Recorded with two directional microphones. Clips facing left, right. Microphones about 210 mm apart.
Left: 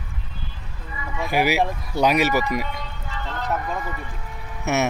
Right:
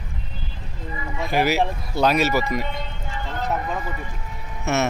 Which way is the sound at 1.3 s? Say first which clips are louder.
Even; 10° left (ahead or behind).